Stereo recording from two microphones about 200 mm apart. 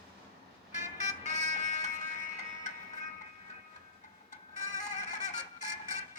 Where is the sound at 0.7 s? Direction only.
35° left (ahead or behind).